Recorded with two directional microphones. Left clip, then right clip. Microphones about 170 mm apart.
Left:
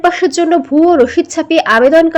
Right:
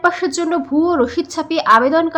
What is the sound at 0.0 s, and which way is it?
A woman's voice, 20° left (ahead or behind).